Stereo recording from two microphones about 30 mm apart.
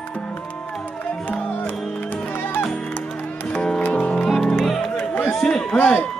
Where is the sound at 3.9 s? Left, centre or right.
Left.